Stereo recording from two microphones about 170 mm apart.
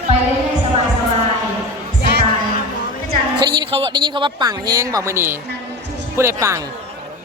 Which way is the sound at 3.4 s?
25° right (ahead or behind).